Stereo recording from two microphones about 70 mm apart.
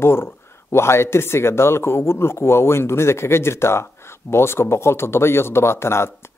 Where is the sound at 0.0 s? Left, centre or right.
Left.